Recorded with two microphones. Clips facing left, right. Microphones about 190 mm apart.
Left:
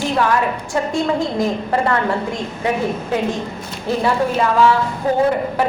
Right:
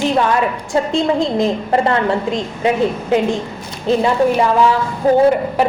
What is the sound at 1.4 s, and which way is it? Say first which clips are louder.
A woman's voice: right 3 dB; 25° right (ahead or behind).